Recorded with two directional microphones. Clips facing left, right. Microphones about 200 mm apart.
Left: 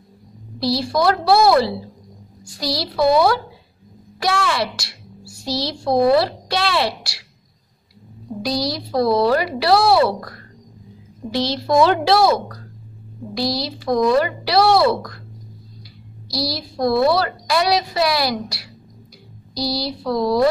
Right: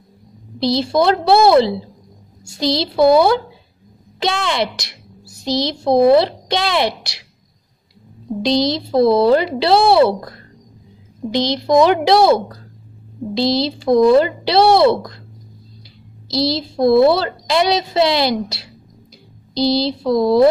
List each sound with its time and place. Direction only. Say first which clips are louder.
0.6 s a woman's voice: right 4 dB; 20° right (ahead or behind)
8.4 s a woman's voice: right 6 dB; 25° right (ahead or behind)
16.3 s a woman's voice: right 6 dB; 25° right (ahead or behind)